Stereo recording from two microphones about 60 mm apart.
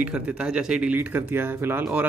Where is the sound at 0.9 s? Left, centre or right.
Right.